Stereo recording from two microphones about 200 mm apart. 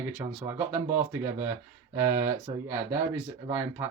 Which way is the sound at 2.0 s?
10° right (ahead or behind).